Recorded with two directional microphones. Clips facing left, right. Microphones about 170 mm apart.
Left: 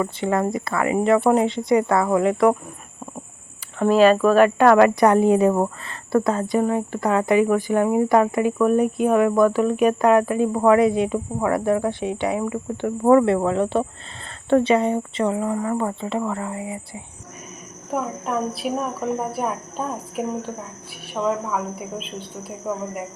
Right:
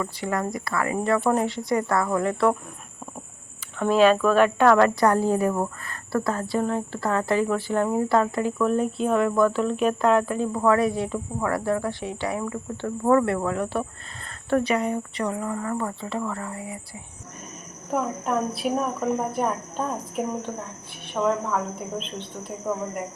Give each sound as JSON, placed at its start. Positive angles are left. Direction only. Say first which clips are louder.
{"t": 0.0, "sound": "speech", "louder": "left 6 dB", "side_deg": 25}
{"t": 3.9, "sound": "speech", "louder": "left 3 dB", "side_deg": 45}
{"t": 4.2, "sound": "a woman's voice", "louder": "left 4 dB", "side_deg": 10}
{"t": 4.8, "sound": "a woman's voice", "louder": "left 4 dB", "side_deg": 20}
{"t": 10.5, "sound": "speech", "louder": "left 5 dB", "side_deg": 20}
{"t": 17.9, "sound": "speech", "louder": "even", "side_deg": 0}